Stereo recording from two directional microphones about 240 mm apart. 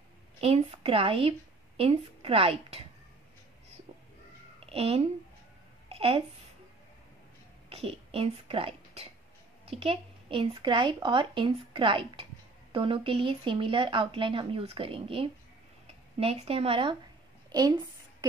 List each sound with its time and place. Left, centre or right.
0.4 s speech: right
4.6 s speech: right
5.9 s a sound: right
7.7 s a woman's voice: right